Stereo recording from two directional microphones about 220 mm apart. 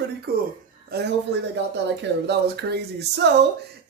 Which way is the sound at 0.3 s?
45° right (ahead or behind).